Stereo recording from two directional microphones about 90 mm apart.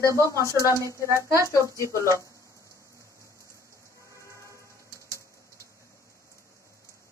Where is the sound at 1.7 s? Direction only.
35° left (ahead or behind).